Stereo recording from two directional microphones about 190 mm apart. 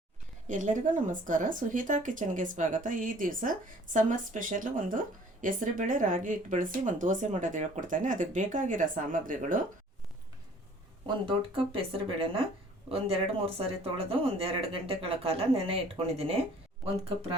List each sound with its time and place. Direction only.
0.4 s a woman's voice: 40° right (ahead or behind)
11.0 s speech: 30° right (ahead or behind)